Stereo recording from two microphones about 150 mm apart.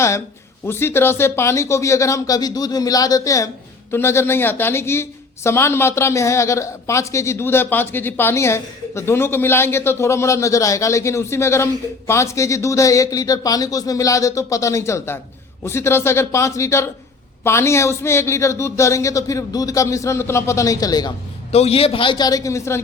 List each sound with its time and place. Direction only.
0.7 s a woman's voice: 15° left (ahead or behind)
21.5 s a man's voice: 45° left (ahead or behind); by 22.8 s 20° left (ahead or behind)